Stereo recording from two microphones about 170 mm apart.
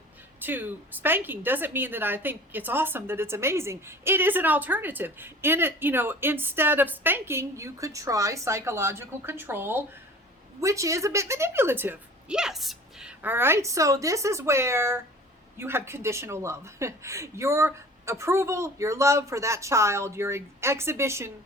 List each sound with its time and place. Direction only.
0.3 s a woman's voice: 10° right (ahead or behind)